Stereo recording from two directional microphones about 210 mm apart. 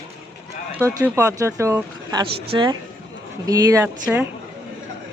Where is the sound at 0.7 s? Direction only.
15° right (ahead or behind).